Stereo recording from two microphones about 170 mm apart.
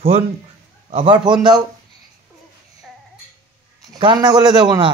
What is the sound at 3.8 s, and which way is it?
A man's voice, 25° right (ahead or behind).